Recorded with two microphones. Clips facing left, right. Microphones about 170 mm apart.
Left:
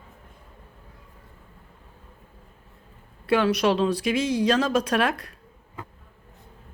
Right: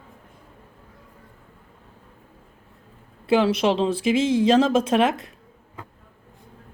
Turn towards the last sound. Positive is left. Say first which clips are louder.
# right 4 dB
turn(degrees=-25)  # may be behind; listen again after turning